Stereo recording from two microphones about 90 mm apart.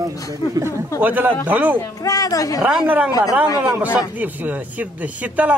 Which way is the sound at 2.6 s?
15° right (ahead or behind).